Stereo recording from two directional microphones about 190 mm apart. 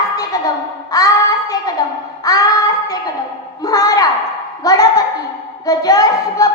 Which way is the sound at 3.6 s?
20° left (ahead or behind).